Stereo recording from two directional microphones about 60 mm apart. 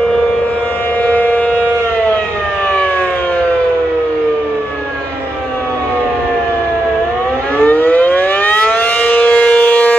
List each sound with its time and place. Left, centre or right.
1.0 s civil defense siren: left
7.5 s civil defense siren: left